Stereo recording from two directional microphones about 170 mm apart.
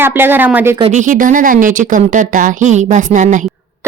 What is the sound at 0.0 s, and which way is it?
Speech, 10° right (ahead or behind).